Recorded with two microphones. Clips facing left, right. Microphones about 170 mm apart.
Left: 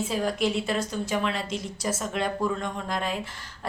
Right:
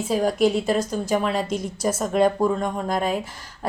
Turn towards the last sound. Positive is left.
turn(degrees=-45)  # may be behind; listen again after turning